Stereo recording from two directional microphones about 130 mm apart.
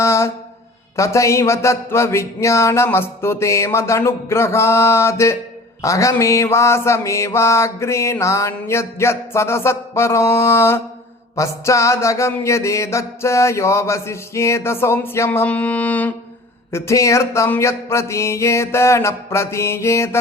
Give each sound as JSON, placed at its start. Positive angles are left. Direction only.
{"t": 0.0, "sound": "a sound", "side_deg": 20}
{"t": 0.9, "sound": "mantra", "side_deg": 25}
{"t": 16.7, "sound": "mantra", "side_deg": 20}